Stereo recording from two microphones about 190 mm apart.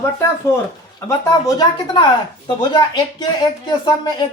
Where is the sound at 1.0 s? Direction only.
20° left (ahead or behind).